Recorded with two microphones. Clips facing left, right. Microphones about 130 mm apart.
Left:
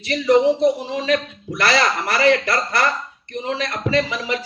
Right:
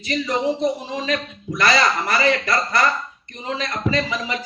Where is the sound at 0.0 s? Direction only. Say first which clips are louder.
Left 7 dB; 70° left (ahead or behind).